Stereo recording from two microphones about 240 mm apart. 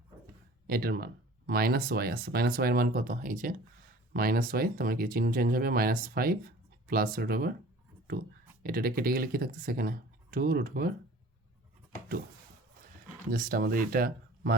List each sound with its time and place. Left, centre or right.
0.7 s speech: right
8.6 s speech: right
13.3 s speech: right